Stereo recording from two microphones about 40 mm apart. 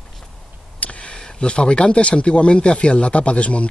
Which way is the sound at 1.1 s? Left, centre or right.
Left.